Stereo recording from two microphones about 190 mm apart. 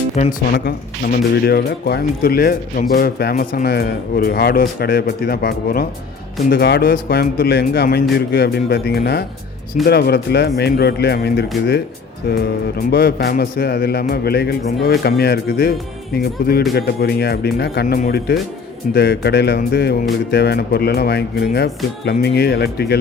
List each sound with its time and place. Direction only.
0.2 s speech: 40° left (ahead or behind)
0.5 s a man's voice: 55° left (ahead or behind)